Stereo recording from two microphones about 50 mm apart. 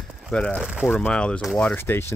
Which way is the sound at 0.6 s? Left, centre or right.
Centre.